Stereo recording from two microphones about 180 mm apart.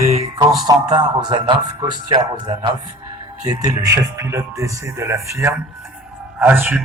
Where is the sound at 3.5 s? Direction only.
20° right (ahead or behind).